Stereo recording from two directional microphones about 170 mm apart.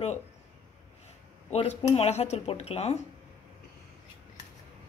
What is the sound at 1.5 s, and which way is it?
A woman's voice, 40° left (ahead or behind).